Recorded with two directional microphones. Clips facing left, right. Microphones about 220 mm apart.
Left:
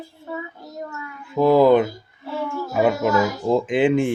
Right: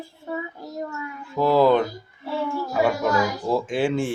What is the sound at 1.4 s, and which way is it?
Speech, 15° left (ahead or behind).